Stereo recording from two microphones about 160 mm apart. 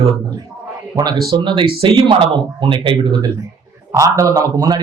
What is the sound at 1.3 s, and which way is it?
A man's voice, 30° right (ahead or behind).